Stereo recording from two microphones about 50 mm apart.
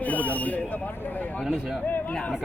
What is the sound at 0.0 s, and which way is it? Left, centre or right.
Speech, left.